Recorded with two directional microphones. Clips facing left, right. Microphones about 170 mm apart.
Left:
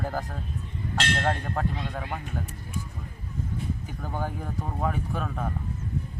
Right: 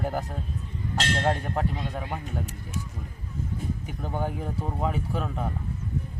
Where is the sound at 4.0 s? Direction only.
20° right (ahead or behind).